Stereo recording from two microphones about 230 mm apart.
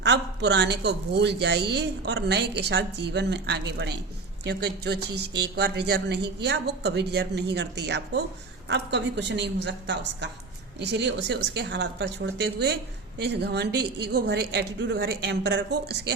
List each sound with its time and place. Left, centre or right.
0.0 s a woman's voice: right